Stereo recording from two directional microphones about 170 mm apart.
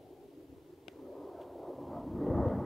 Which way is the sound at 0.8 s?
Centre (ahead or behind).